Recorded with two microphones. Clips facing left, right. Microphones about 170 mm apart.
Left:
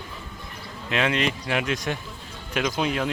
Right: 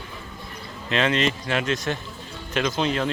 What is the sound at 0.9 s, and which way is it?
Speech, 10° left (ahead or behind).